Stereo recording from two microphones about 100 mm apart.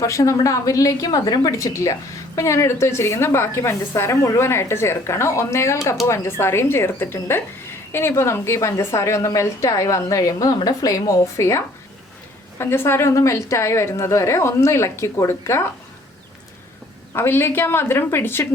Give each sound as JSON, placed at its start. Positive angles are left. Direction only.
{"t": 0.0, "sound": "a woman's voice", "side_deg": 35}
{"t": 1.5, "sound": "a woman's voice", "side_deg": 30}
{"t": 17.2, "sound": "a woman's voice", "side_deg": 25}